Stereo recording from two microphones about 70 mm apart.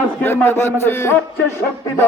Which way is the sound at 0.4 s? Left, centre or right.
Left.